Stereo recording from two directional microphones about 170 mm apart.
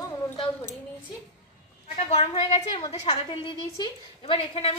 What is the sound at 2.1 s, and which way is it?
A woman's voice, 35° left (ahead or behind).